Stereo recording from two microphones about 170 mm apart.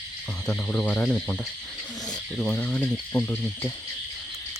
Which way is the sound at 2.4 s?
10° left (ahead or behind).